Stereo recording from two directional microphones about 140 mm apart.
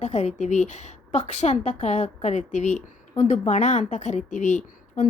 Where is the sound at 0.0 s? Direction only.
55° left (ahead or behind).